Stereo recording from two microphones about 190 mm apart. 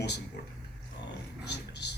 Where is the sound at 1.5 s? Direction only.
65° left (ahead or behind).